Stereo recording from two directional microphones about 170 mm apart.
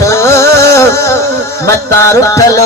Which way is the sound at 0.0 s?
15° left (ahead or behind).